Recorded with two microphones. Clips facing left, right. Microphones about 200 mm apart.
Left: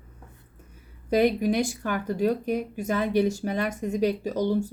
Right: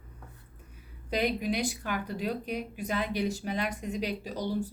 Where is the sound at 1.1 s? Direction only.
50° left (ahead or behind).